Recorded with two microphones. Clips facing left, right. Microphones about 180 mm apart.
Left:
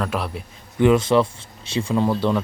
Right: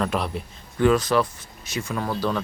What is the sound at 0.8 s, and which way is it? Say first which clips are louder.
Speech: left 3 dB; 25° left (ahead or behind).